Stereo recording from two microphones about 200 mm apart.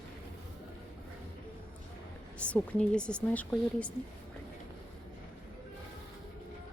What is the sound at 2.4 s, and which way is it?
Speech, 5° left (ahead or behind).